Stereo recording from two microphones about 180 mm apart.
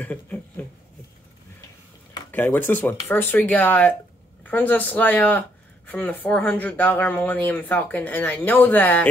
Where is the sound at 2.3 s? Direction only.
10° left (ahead or behind).